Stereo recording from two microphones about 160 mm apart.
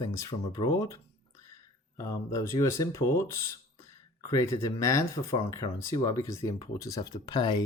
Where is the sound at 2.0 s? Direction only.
20° left (ahead or behind).